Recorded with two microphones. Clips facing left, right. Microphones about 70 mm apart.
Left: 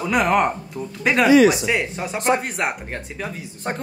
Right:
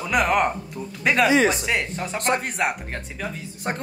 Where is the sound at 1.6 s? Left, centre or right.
Centre.